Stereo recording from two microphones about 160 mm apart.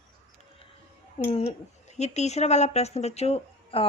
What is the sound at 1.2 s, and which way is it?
Speech, 40° left (ahead or behind).